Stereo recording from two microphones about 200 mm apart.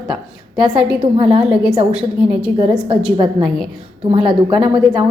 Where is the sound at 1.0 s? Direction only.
30° right (ahead or behind).